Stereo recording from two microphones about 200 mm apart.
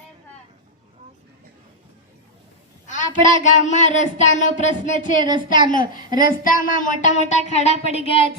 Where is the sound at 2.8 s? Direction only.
40° left (ahead or behind).